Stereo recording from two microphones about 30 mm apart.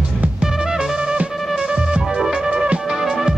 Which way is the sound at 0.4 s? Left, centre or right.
Right.